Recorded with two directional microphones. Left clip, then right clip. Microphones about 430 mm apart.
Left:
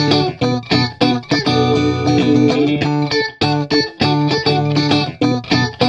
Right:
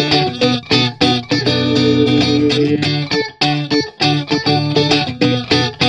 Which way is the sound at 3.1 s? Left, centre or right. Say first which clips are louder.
Right 2 dB; centre.